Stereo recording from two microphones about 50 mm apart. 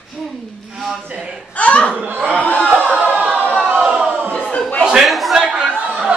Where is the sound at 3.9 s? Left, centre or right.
Centre.